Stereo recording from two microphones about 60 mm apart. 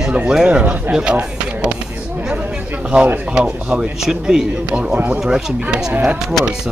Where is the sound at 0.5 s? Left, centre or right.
Right.